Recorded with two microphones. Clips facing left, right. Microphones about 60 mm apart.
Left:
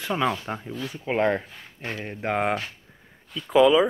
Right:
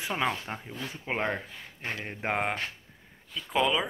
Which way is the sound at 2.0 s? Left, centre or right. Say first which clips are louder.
Left 5 dB; centre.